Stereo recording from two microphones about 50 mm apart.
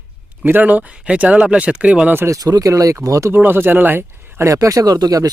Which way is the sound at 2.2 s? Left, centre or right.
Right.